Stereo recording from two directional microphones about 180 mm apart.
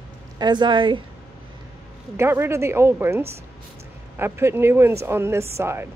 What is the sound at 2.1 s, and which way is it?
Speech, 15° right (ahead or behind).